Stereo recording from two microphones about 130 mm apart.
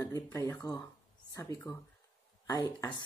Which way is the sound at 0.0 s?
25° left (ahead or behind).